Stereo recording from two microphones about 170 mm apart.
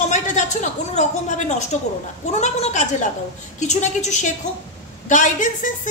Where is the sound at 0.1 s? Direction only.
45° left (ahead or behind).